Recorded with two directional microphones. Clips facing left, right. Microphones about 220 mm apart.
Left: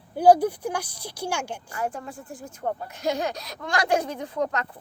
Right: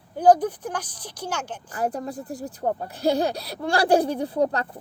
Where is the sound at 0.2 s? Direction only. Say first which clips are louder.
Even; 10° left (ahead or behind).